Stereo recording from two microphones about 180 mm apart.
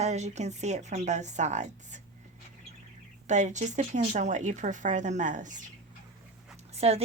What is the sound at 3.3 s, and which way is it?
Speech, 40° right (ahead or behind).